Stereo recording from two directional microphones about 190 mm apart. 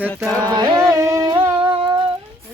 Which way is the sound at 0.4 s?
20° right (ahead or behind).